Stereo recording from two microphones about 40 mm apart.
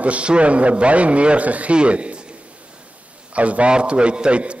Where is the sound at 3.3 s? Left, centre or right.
Right.